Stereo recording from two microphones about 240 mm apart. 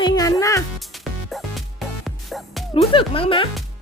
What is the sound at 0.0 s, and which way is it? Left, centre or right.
Speech, centre.